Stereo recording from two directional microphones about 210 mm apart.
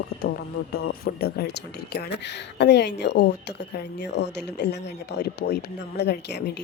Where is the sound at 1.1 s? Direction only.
45° left (ahead or behind).